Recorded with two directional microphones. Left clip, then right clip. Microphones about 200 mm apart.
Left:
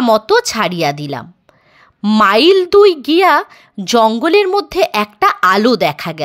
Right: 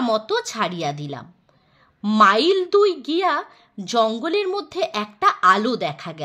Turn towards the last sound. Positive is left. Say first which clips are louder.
# left 11 dB
turn(degrees=35)  # may be behind; listen again after turning